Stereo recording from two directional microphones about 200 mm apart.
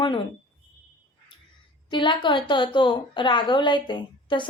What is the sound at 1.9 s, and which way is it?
A woman's voice, 25° left (ahead or behind).